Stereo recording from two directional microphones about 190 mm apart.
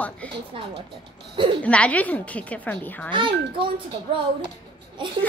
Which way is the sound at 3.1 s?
25° right (ahead or behind).